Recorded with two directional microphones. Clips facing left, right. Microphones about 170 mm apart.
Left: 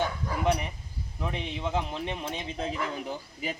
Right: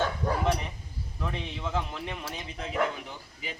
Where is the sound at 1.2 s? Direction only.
20° left (ahead or behind).